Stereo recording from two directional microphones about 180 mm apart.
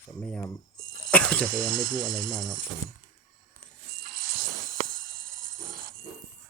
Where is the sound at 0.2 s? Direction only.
5° left (ahead or behind).